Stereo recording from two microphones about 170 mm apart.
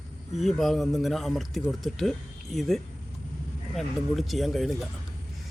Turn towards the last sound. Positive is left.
turn(degrees=0)  # may be behind; listen again after turning